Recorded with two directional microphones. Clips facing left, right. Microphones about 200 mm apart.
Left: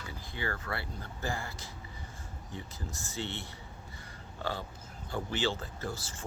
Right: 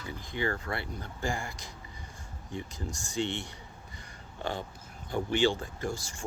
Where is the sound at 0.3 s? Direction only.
15° right (ahead or behind).